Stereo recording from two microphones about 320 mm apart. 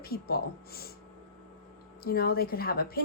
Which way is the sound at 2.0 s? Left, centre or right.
Left.